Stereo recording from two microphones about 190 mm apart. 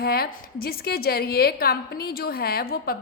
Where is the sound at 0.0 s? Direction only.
55° left (ahead or behind).